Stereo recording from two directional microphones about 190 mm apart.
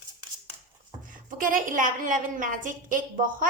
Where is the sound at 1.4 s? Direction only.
45° right (ahead or behind).